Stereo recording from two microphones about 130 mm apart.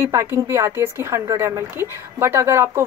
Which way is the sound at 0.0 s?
20° right (ahead or behind).